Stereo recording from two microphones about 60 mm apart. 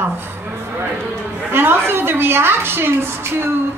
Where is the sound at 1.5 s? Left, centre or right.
Right.